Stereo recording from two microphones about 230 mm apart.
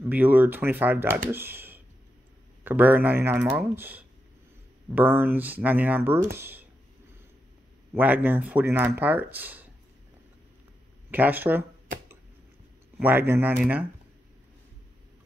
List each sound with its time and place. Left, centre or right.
0.0 s speech: centre
7.9 s speech: centre
11.1 s speech: centre
13.0 s speech: centre